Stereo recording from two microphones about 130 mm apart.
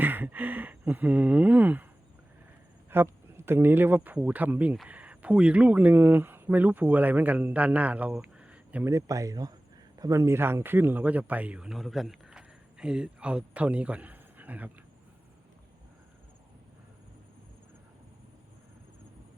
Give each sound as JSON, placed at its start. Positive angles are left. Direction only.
{"t": 0.0, "sound": "speech", "side_deg": -15}
{"t": 2.9, "sound": "speech", "side_deg": -15}
{"t": 8.9, "sound": "a man's voice", "side_deg": -25}